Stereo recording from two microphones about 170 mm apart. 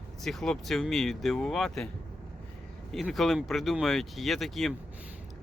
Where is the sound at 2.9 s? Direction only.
Centre (ahead or behind).